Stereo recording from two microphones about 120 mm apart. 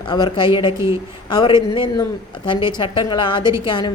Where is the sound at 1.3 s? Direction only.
40° left (ahead or behind).